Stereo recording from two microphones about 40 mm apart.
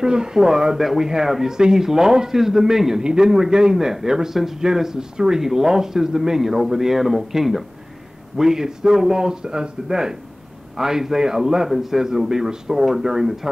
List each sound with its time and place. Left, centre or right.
0.0 s speech: centre